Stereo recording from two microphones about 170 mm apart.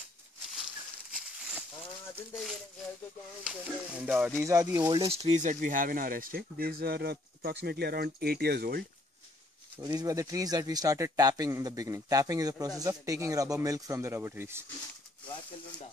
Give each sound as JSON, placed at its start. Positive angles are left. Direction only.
{"t": 1.1, "sound": "a sound", "side_deg": -5}
{"t": 3.4, "sound": "sizzle", "side_deg": -5}
{"t": 5.0, "sound": "speech", "side_deg": -40}
{"t": 9.8, "sound": "speech", "side_deg": -20}
{"t": 15.2, "sound": "speech", "side_deg": 30}